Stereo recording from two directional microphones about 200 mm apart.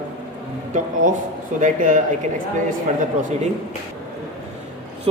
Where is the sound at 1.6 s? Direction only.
40° right (ahead or behind).